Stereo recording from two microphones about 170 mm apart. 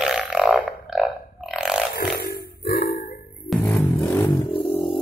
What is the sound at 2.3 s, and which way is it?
Music, 70° left (ahead or behind).